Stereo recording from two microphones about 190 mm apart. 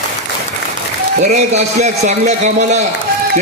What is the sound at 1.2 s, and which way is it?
A man's voice, 35° right (ahead or behind).